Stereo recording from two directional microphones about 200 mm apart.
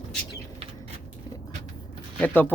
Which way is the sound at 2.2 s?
10° left (ahead or behind).